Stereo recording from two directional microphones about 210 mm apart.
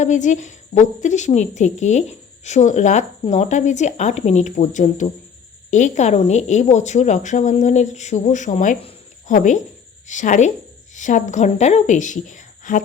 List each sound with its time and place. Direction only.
0.0 s a woman's voice: 35° left (ahead or behind)